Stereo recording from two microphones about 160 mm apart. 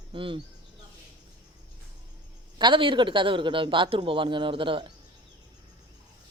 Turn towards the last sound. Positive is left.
turn(degrees=-30)  # may be behind; listen again after turning